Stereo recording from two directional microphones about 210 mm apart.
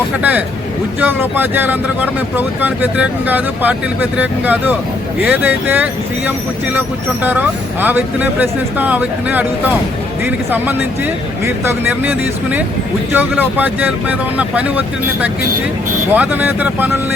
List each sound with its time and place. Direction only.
0.2 s speech: 5° right (ahead or behind)